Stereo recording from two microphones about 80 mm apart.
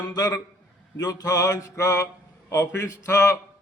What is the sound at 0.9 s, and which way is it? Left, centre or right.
Speech, left.